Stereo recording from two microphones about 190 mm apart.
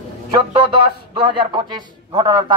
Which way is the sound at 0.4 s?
25° right (ahead or behind).